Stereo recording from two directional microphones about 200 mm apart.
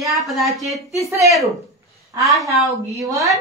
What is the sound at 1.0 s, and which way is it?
Speech, 15° right (ahead or behind).